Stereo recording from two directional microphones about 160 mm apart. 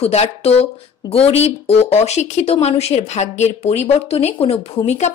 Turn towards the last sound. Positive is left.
turn(degrees=45)  # may be behind; listen again after turning